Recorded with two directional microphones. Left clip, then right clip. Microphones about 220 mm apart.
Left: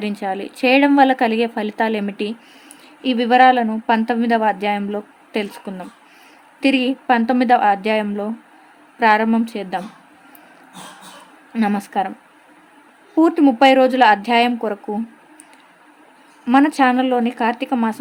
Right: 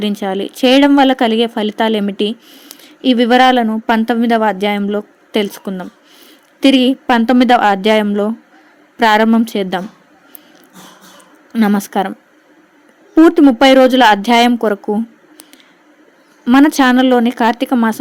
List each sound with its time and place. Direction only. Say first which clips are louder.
0.0 s speech: right 5 dB; 25° right (ahead or behind)
11.5 s speech: right 5 dB; 25° right (ahead or behind)
13.1 s speech: right 6 dB; 25° right (ahead or behind)
16.5 s speech: right 4 dB; 30° right (ahead or behind)